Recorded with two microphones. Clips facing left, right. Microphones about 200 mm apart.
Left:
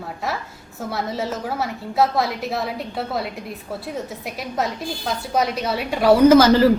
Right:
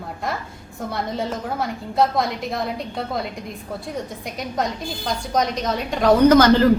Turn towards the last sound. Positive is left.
turn(degrees=5)  # may be behind; listen again after turning